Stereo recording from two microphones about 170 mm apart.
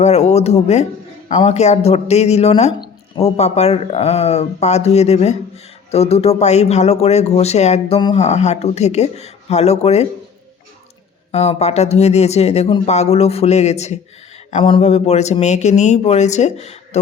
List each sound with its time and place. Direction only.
0.0 s speech: 40° left (ahead or behind)
11.3 s speech: 40° left (ahead or behind)